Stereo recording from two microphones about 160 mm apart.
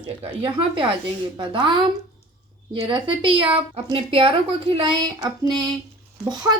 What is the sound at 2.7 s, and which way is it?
A woman's voice, 30° right (ahead or behind).